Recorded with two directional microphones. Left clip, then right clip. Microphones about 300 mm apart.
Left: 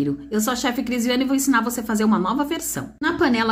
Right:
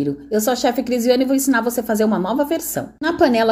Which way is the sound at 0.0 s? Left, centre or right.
Centre.